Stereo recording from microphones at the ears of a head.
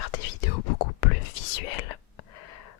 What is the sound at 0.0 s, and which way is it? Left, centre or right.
Whispering, left.